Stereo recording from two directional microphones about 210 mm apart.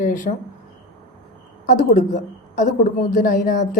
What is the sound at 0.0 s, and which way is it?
Speech, 35° left (ahead or behind).